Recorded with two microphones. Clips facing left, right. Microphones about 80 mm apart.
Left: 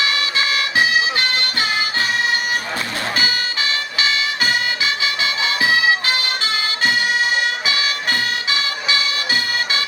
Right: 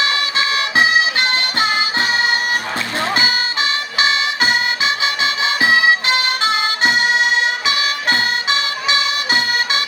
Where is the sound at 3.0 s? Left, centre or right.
Right.